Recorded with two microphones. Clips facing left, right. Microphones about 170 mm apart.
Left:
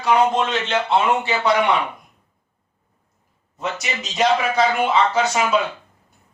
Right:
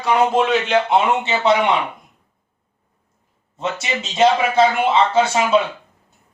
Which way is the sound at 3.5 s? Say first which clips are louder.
Right 3 dB; 25° right (ahead or behind).